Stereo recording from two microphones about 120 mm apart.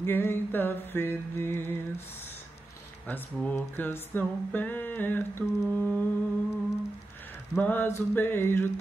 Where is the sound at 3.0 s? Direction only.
15° left (ahead or behind).